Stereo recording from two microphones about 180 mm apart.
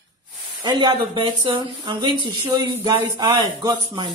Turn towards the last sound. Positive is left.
turn(degrees=-20)  # may be behind; listen again after turning